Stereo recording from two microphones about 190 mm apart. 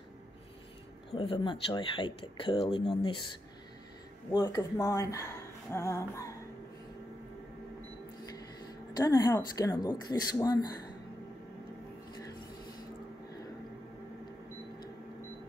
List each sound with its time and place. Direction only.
1.1 s a woman's voice: 30° left (ahead or behind)
4.3 s speech: 20° left (ahead or behind)
8.9 s a woman's voice: 20° left (ahead or behind)